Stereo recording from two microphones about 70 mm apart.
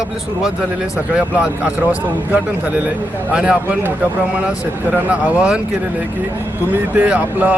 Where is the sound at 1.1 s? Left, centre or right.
Centre.